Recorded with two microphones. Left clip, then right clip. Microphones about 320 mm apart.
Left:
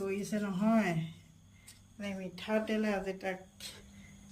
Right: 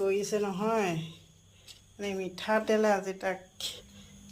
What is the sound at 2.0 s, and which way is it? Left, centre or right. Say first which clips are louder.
Speech: right 7 dB; centre.